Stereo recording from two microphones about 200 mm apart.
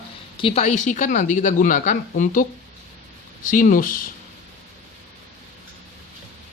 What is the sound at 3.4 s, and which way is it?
Speech, 40° left (ahead or behind).